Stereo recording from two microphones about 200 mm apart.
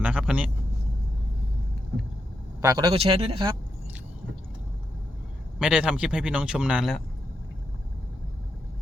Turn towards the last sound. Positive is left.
turn(degrees=-5)  # may be behind; listen again after turning